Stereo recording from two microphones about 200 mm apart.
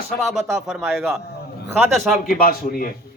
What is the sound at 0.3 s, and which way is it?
Speech, centre (ahead or behind).